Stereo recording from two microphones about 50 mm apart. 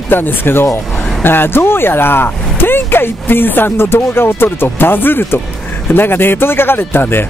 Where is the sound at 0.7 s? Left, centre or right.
Centre.